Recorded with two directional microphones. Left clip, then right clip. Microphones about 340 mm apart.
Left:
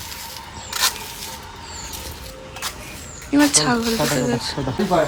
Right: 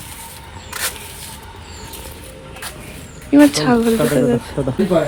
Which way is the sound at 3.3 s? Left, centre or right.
Centre.